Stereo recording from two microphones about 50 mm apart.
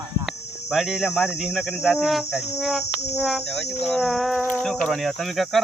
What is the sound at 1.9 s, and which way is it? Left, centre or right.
Speech, centre.